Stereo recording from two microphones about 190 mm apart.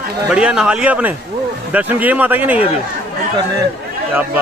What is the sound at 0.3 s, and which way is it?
A man's voice, 5° right (ahead or behind).